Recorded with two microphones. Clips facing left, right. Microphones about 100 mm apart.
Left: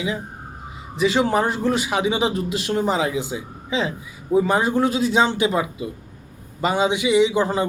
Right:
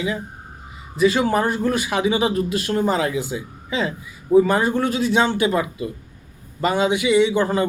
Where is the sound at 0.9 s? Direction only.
20° left (ahead or behind).